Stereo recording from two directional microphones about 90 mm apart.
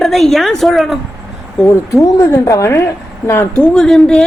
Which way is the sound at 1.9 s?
35° left (ahead or behind).